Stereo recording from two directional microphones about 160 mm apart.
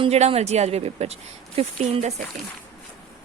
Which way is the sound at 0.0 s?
40° right (ahead or behind).